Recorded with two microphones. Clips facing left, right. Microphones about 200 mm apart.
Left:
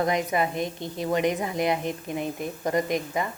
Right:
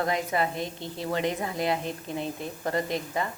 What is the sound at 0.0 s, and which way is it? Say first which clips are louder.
A woman's voice: left 3 dB; 20° left (ahead or behind).